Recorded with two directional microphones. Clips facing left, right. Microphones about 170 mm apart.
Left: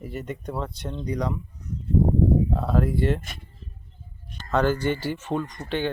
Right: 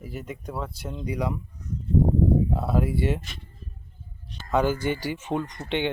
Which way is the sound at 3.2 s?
50° left (ahead or behind).